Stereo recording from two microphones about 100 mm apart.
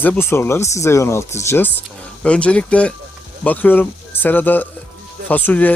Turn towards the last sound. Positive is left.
turn(degrees=15)  # may be behind; listen again after turning